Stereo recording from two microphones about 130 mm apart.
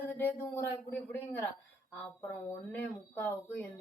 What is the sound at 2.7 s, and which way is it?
Speech, 15° left (ahead or behind).